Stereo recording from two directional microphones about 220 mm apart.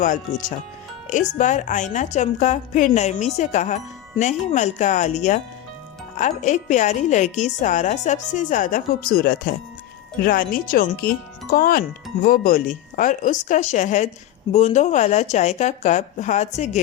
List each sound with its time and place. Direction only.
0.0 s a woman's voice: 35° left (ahead or behind)